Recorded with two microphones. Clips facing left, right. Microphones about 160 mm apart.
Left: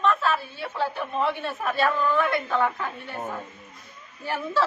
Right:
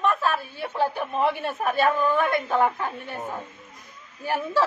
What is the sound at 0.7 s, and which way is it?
Speech, 15° right (ahead or behind).